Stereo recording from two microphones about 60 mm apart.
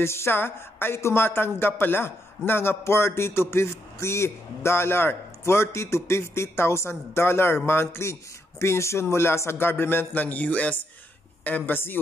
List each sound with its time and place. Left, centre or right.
0.0 s a woman's voice: left